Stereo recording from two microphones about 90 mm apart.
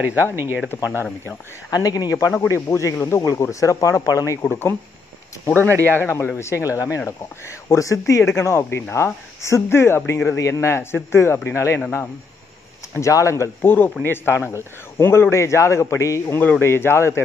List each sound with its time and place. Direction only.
1.7 s a man's voice: 45° left (ahead or behind)
4.4 s speech: 25° left (ahead or behind)
5.7 s speech: 30° right (ahead or behind)
5.9 s a man's voice: 25° left (ahead or behind)
12.9 s a man's voice: 35° left (ahead or behind)
16.3 s speech: 20° left (ahead or behind)